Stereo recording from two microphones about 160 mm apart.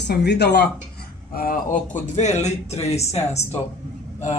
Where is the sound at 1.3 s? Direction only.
60° left (ahead or behind).